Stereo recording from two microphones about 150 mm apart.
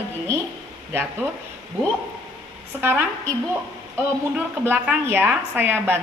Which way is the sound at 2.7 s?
15° right (ahead or behind).